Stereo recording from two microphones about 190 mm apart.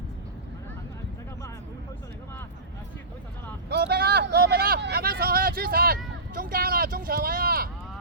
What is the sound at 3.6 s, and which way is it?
Vehicle, 55° right (ahead or behind).